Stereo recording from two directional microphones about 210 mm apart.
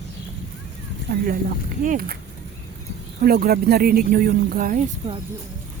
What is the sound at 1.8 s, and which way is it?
Speech, 45° right (ahead or behind).